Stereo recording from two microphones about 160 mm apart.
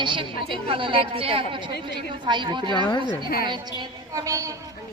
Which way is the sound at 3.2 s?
65° left (ahead or behind).